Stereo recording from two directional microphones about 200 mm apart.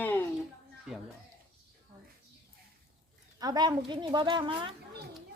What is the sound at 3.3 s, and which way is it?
Speech, 20° right (ahead or behind).